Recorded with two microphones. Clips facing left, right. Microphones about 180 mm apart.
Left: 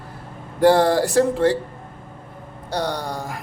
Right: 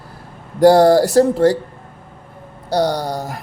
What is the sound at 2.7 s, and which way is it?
Speech, 35° right (ahead or behind).